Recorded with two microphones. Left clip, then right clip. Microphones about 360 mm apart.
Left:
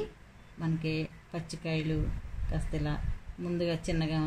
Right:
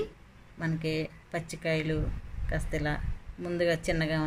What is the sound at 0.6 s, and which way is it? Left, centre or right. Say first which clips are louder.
Speech: right 3 dB; centre.